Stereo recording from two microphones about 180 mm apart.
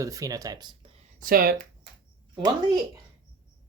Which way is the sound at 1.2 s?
55° right (ahead or behind).